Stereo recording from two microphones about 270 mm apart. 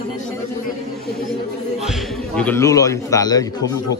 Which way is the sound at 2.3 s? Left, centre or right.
Centre.